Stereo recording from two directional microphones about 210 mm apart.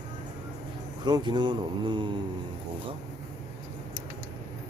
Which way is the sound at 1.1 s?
20° right (ahead or behind).